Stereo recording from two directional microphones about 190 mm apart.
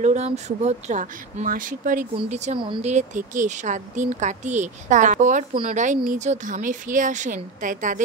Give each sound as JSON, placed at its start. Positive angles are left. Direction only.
{"t": 0.0, "sound": "speech", "side_deg": -35}
{"t": 2.9, "sound": "speech", "side_deg": -40}
{"t": 5.5, "sound": "speech", "side_deg": -25}
{"t": 6.0, "sound": "speech", "side_deg": -40}